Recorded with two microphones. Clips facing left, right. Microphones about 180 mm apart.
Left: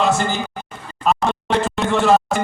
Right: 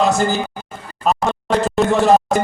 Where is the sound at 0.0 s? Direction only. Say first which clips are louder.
Right 2 dB; 40° right (ahead or behind).